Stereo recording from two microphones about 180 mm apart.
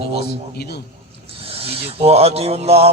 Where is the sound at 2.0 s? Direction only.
35° right (ahead or behind).